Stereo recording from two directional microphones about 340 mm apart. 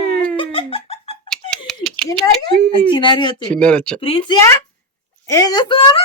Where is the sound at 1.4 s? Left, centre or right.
Centre.